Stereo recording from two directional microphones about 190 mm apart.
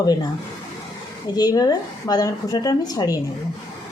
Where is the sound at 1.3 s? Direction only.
20° left (ahead or behind).